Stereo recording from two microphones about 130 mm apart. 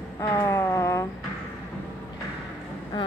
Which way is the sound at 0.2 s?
25° left (ahead or behind).